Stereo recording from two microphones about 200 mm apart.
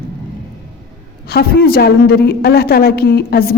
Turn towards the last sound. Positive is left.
turn(degrees=50)  # may be behind; listen again after turning